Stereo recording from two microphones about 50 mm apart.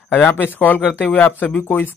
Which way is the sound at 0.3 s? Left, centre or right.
Left.